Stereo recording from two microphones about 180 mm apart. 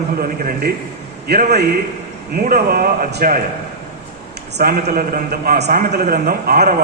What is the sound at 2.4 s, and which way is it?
Speech, 50° right (ahead or behind).